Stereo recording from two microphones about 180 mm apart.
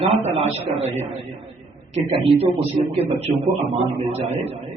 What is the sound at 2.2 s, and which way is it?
Speech, 30° right (ahead or behind).